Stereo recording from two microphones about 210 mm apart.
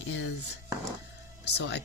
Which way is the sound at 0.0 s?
60° left (ahead or behind).